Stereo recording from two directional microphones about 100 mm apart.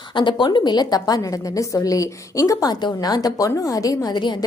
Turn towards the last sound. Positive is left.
turn(degrees=50)  # may be behind; listen again after turning